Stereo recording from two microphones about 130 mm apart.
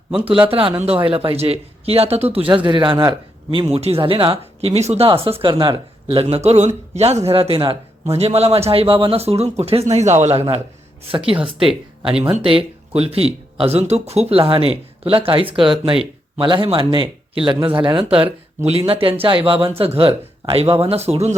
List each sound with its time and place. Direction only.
0.4 s speech: 45° right (ahead or behind)
3.7 s speech: 55° right (ahead or behind)
5.0 s speech: 45° right (ahead or behind)
6.2 s speech: 55° right (ahead or behind)
7.3 s speech: 45° right (ahead or behind)
9.9 s speech: 60° right (ahead or behind)
11.1 s speech: 45° right (ahead or behind)
11.5 s speech: 5° right (ahead or behind)
12.4 s speech: 45° right (ahead or behind)